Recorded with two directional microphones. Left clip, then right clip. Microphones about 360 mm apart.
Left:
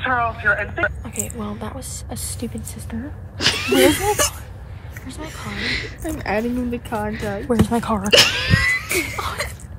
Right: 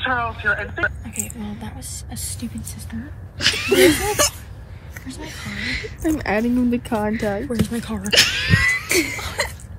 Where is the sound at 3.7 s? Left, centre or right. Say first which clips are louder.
Right 1 dB; centre.